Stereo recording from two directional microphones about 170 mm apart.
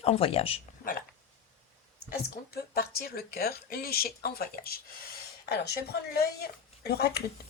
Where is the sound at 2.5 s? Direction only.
65° left (ahead or behind).